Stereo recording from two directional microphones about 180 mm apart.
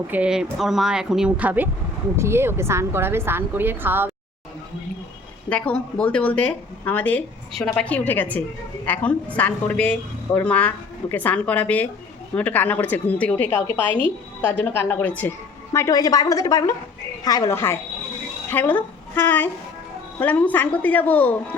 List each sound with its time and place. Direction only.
0.1 s a woman's voice: 5° right (ahead or behind)
5.5 s a woman's voice: 5° left (ahead or behind)